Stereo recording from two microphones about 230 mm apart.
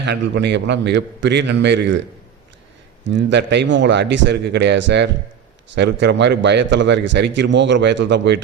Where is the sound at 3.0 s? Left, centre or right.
Right.